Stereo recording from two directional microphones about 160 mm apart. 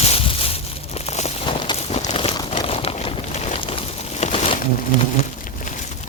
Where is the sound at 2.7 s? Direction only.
40° left (ahead or behind).